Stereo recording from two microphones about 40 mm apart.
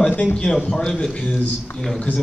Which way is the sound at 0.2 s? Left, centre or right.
Left.